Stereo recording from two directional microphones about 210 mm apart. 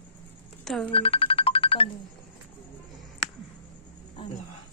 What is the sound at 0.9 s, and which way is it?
Music, 25° left (ahead or behind).